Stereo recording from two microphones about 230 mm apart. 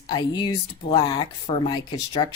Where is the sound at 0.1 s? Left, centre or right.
Centre.